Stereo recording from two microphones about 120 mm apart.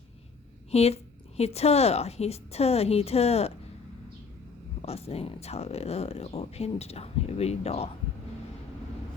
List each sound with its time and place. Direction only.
0.7 s a woman's voice: 60° left (ahead or behind)
4.8 s speech: 60° left (ahead or behind)